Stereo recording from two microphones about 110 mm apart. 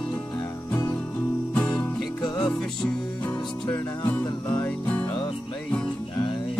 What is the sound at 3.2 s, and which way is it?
Music, 15° left (ahead or behind).